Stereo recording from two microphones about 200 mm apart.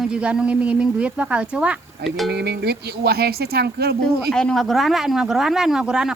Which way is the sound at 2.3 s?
55° right (ahead or behind).